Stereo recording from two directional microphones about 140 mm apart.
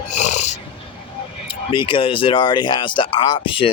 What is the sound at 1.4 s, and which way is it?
Speech, 35° left (ahead or behind).